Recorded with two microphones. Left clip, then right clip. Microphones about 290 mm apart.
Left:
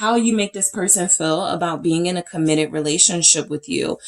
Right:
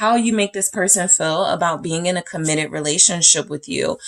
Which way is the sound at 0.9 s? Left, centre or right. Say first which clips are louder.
Even; right.